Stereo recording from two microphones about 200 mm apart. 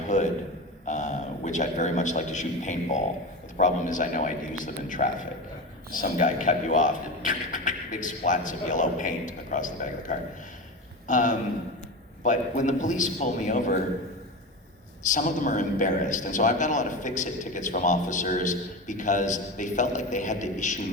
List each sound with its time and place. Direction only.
0.1 s a man's voice: 35° left (ahead or behind)
15.0 s a man's voice: 40° left (ahead or behind)